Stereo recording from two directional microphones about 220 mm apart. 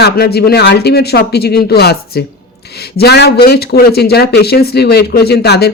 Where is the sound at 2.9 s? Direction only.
50° left (ahead or behind).